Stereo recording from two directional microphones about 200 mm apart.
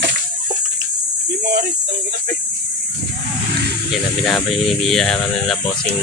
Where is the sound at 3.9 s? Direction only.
Centre (ahead or behind).